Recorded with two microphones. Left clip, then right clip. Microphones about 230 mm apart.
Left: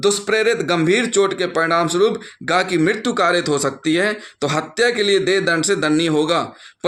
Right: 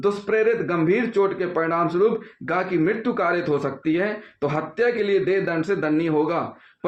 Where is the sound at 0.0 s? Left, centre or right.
Left.